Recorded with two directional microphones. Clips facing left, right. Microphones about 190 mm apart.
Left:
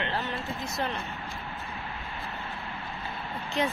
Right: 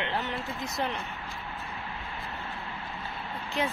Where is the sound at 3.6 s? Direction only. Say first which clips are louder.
Left 2 dB; 5° right (ahead or behind).